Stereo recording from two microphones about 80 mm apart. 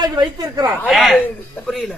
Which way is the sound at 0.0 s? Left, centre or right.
Right.